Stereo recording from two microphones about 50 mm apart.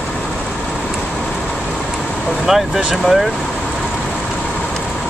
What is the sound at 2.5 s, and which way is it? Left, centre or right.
Speech, centre.